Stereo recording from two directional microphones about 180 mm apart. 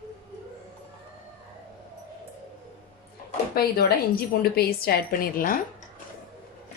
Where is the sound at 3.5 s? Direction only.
60° left (ahead or behind).